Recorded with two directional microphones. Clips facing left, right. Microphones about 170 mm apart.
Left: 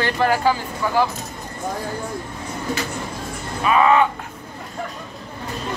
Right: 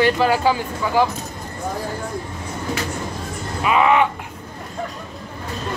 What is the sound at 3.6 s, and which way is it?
Speech, 15° right (ahead or behind).